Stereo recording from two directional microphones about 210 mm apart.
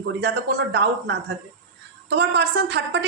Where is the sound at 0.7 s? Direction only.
50° right (ahead or behind).